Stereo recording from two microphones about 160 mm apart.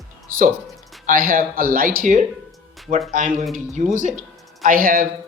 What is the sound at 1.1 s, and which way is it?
Speech, 60° right (ahead or behind).